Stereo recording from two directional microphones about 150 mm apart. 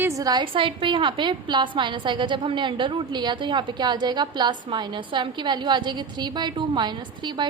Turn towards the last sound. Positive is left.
turn(degrees=-30)  # may be behind; listen again after turning